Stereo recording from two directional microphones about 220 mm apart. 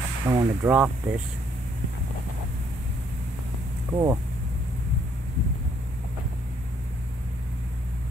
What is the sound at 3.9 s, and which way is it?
Speech, 15° right (ahead or behind).